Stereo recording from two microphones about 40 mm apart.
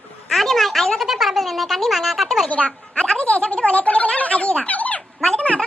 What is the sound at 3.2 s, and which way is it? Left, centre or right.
Speech, left.